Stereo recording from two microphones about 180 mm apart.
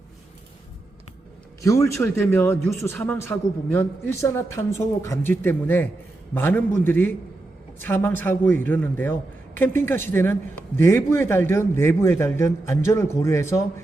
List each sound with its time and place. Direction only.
1.6 s a man's voice: 15° left (ahead or behind)